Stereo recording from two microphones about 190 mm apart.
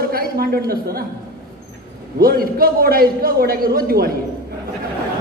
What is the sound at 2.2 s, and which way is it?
A man's voice, 50° right (ahead or behind).